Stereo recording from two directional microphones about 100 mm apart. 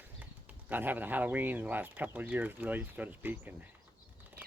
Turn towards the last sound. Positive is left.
turn(degrees=-20)  # may be behind; listen again after turning